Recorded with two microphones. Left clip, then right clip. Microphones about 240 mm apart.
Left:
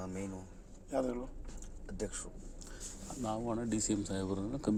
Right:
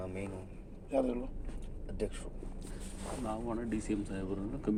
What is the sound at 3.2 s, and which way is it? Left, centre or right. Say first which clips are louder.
Speech: left 2 dB; left.